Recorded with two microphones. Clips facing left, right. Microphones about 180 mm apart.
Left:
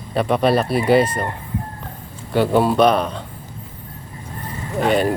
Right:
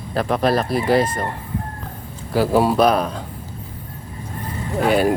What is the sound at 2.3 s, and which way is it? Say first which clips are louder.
Speech: left 1 dB; centre (ahead or behind).